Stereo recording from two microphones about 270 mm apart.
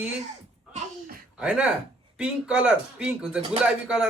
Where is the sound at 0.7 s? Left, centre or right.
Right.